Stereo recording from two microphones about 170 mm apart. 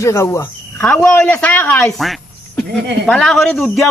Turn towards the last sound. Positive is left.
turn(degrees=5)  # may be behind; listen again after turning